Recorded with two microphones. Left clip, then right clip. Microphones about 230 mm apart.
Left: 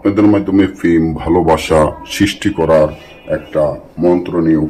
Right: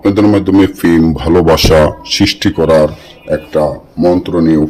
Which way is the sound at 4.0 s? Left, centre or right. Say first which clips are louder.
Right 2 dB; right.